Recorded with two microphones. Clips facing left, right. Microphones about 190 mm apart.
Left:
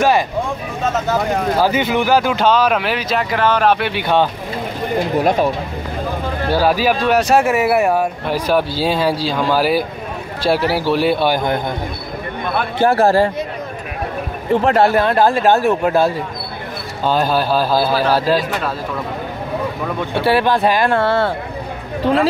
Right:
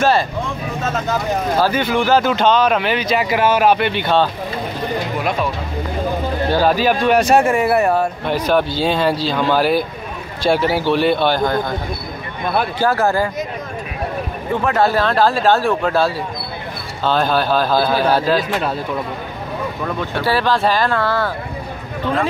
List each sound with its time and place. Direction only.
1.6 s speech: 15° left (ahead or behind)
3.3 s speech: 10° right (ahead or behind); by 4.3 s 10° left (ahead or behind)
5.1 s speech: 40° left (ahead or behind)
6.5 s speech: 5° left (ahead or behind)
12.7 s speech: 25° left (ahead or behind)
14.5 s speech: 30° left (ahead or behind)
15.0 s speech: 15° left (ahead or behind)
20.2 s speech: 20° left (ahead or behind)